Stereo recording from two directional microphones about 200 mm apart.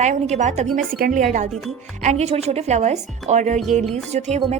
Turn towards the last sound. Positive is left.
turn(degrees=-35)  # may be behind; listen again after turning